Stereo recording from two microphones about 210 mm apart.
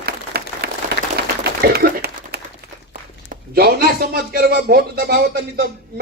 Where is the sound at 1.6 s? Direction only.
45° right (ahead or behind).